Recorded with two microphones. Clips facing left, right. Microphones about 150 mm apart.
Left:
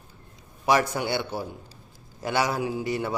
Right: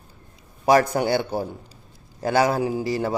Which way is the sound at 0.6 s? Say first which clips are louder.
Right 5 dB; 45° right (ahead or behind).